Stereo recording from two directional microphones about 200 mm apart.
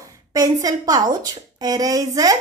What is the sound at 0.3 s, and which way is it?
A woman's voice, 20° right (ahead or behind).